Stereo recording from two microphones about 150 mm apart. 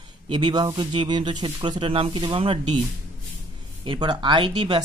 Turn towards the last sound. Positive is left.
turn(degrees=-30)  # may be behind; listen again after turning